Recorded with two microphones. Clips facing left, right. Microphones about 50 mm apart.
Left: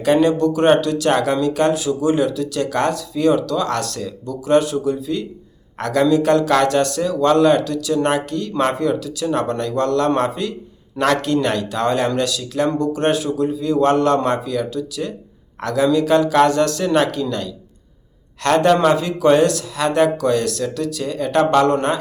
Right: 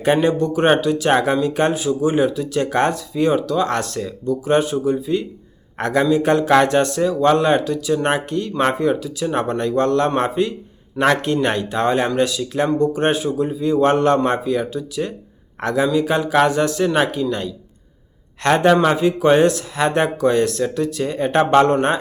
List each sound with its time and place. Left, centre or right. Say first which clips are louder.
0.0 s speech: left 2 dB; right